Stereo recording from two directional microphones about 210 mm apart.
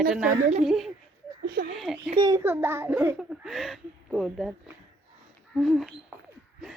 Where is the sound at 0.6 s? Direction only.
Centre (ahead or behind).